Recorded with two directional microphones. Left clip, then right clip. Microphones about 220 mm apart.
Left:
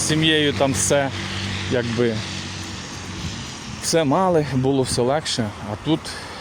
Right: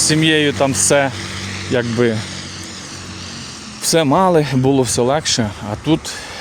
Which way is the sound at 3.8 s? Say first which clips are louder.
Right 5 dB; 30° right (ahead or behind).